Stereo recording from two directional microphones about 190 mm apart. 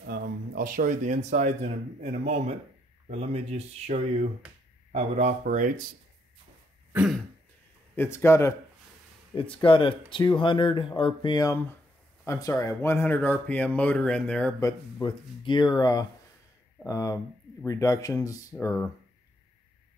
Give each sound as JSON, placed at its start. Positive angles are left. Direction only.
{"t": 0.0, "sound": "speech", "side_deg": -60}
{"t": 6.9, "sound": "throat clearing", "side_deg": -5}
{"t": 7.9, "sound": "speech", "side_deg": 10}
{"t": 9.3, "sound": "speech", "side_deg": 25}
{"t": 14.6, "sound": "speech", "side_deg": 25}